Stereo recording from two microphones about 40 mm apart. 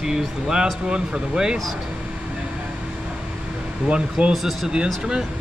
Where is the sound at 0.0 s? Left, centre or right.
Centre.